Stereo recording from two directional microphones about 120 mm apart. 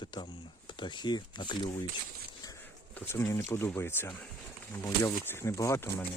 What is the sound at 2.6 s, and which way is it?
Speech, 15° left (ahead or behind).